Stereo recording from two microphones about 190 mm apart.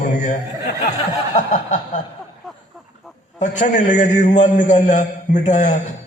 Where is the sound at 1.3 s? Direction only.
40° left (ahead or behind).